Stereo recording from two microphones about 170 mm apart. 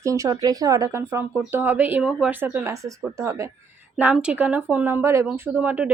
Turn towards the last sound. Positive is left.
turn(degrees=-10)  # may be behind; listen again after turning